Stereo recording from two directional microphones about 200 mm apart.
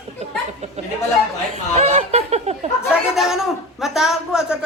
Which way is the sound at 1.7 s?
35° right (ahead or behind).